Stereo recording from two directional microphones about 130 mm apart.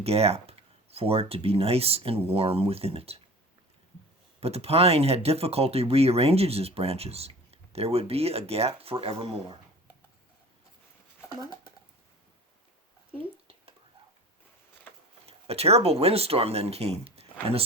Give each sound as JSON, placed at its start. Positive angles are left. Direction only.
{"t": 0.0, "sound": "speech", "side_deg": -50}
{"t": 4.4, "sound": "speech", "side_deg": -50}
{"t": 15.3, "sound": "speech", "side_deg": -50}